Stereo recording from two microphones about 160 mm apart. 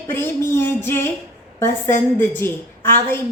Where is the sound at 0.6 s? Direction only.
15° left (ahead or behind).